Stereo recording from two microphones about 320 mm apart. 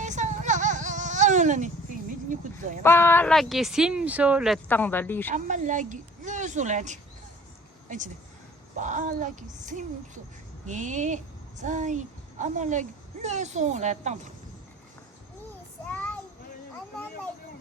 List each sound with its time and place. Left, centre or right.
0.0 s a sound: right
2.8 s speech: centre
5.3 s a woman's voice: right
15.9 s child singing: centre